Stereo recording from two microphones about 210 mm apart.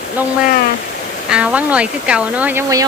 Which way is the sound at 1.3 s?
5° right (ahead or behind).